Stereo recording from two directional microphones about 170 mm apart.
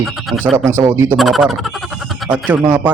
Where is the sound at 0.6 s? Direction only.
15° right (ahead or behind).